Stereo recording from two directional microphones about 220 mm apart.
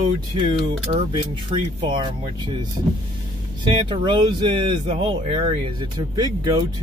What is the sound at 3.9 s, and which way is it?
Speech, 20° right (ahead or behind).